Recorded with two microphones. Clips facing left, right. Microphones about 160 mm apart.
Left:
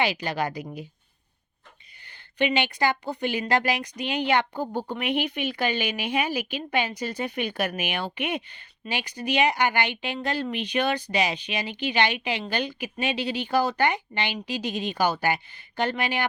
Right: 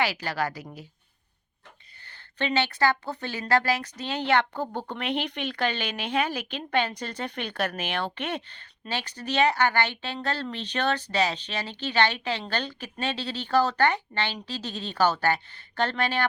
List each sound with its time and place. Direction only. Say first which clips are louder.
0.0 s a woman's voice: left 2 dB; 20° left (ahead or behind)
2.0 s speech: left 5 dB; 15° left (ahead or behind)